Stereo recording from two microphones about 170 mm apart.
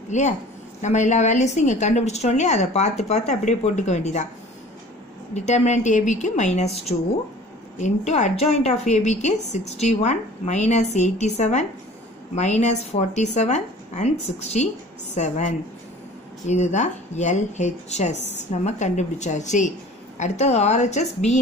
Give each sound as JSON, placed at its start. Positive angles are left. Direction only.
{"t": 0.1, "sound": "a woman's voice", "side_deg": 45}
{"t": 5.3, "sound": "a woman's voice", "side_deg": 40}
{"t": 7.8, "sound": "a woman's voice", "side_deg": 40}